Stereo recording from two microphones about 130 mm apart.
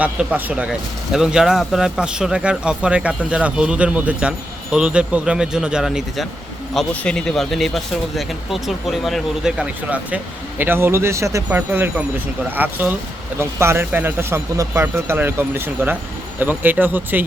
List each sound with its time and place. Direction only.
0.0 s speech: 10° right (ahead or behind)
6.7 s speech: 10° left (ahead or behind); by 17.2 s 15° right (ahead or behind)